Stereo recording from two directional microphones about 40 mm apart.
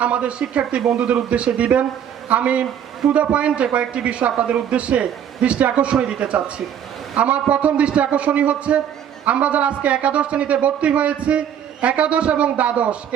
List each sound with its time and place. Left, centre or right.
0.0 s a man's voice: right